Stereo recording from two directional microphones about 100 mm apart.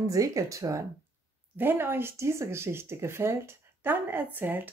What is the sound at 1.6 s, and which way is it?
Speech, 20° right (ahead or behind).